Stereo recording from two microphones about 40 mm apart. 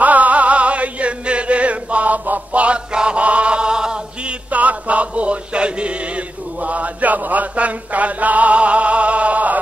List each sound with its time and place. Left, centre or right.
0.0 s music: right
2.6 s chant: right
4.5 s music: right